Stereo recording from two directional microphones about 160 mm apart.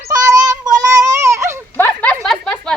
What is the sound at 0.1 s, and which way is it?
Child singing, 20° right (ahead or behind).